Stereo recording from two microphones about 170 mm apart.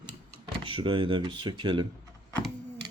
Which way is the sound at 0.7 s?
30° right (ahead or behind).